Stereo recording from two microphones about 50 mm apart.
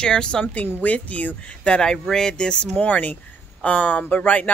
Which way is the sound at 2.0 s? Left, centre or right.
Centre.